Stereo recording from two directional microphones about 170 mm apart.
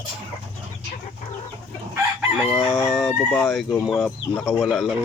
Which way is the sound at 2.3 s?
Centre (ahead or behind).